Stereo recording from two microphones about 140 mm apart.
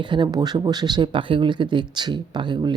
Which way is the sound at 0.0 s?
35° right (ahead or behind).